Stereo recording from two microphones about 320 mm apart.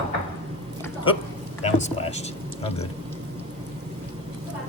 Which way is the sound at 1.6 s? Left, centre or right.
Centre.